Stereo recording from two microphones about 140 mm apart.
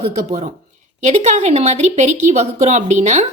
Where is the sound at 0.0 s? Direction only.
55° right (ahead or behind).